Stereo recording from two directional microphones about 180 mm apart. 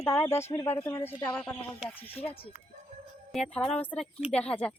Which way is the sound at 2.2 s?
30° left (ahead or behind).